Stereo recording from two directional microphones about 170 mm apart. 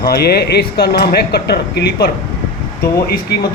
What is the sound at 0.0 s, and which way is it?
Speech, 65° left (ahead or behind).